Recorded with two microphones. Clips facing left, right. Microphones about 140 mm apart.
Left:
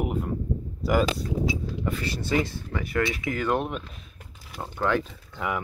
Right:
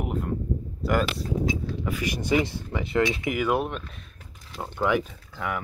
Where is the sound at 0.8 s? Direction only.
Centre (ahead or behind).